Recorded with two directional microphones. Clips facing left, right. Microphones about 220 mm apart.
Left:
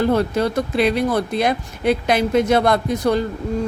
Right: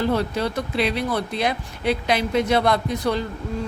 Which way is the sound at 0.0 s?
50° left (ahead or behind).